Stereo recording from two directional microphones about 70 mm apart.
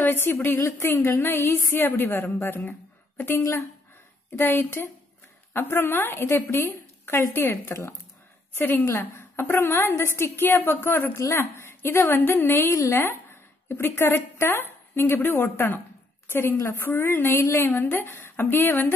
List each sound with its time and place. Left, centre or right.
0.0 s a woman's voice: left
12.6 s a woman's voice: left